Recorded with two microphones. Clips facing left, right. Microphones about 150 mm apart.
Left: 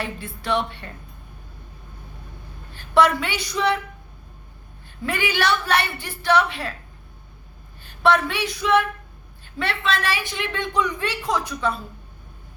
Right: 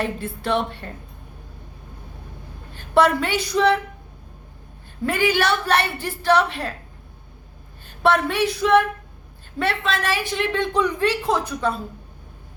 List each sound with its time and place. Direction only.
0.0 s a woman's voice: 40° right (ahead or behind)
2.7 s a woman's voice: 40° right (ahead or behind)
5.0 s a woman's voice: 45° right (ahead or behind)
7.9 s a woman's voice: 45° right (ahead or behind)